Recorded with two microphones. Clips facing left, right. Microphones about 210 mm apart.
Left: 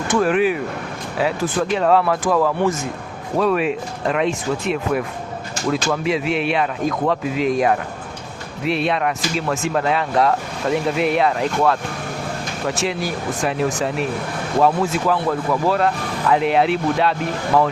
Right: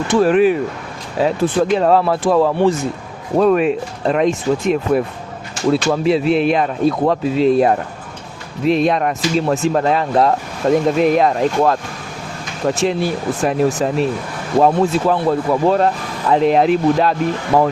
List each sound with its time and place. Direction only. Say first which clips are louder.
0.2 s speech: right 5 dB; 40° right (ahead or behind)